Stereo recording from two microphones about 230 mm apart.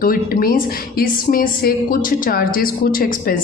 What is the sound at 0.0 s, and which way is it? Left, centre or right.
A woman's voice, left.